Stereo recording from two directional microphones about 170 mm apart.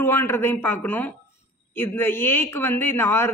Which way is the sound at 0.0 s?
15° left (ahead or behind).